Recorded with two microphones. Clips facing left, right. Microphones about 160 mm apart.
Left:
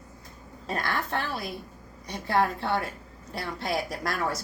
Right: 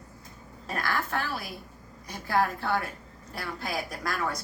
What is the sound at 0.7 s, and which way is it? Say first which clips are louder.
Speech: left 1 dB; 25° left (ahead or behind).